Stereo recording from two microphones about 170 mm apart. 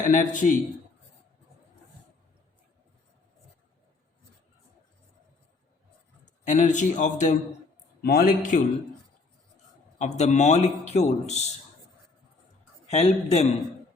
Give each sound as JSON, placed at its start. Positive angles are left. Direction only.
{"t": 0.1, "sound": "a man's voice", "side_deg": 50}
{"t": 6.2, "sound": "a man's voice", "side_deg": 45}
{"t": 8.0, "sound": "a man's voice", "side_deg": 65}
{"t": 10.0, "sound": "a man's voice", "side_deg": 40}
{"t": 12.9, "sound": "a man's voice", "side_deg": 40}